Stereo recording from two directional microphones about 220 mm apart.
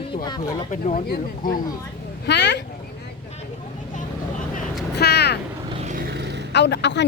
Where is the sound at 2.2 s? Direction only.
50° left (ahead or behind).